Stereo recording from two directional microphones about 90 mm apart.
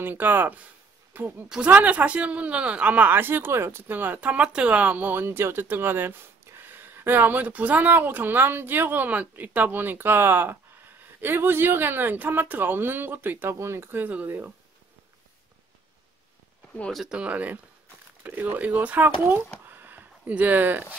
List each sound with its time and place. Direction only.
0.0 s speech: 20° right (ahead or behind)
16.9 s speech: 5° right (ahead or behind)
19.6 s a sound: 20° right (ahead or behind)